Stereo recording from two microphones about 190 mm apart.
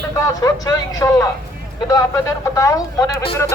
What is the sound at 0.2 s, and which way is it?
A man's voice, 20° left (ahead or behind).